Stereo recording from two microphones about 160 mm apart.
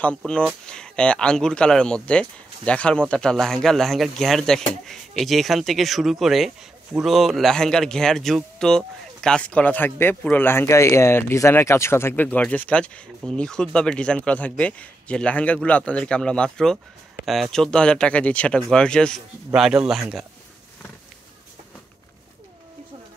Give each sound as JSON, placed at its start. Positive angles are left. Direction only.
{"t": 0.0, "sound": "a man's voice", "side_deg": 5}